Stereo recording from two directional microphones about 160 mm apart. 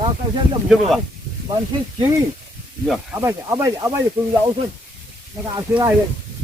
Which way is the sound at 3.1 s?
20° right (ahead or behind).